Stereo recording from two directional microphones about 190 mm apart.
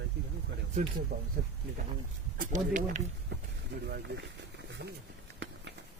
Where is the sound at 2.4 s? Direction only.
40° right (ahead or behind).